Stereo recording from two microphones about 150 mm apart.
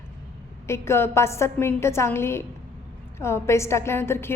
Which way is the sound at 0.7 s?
15° left (ahead or behind).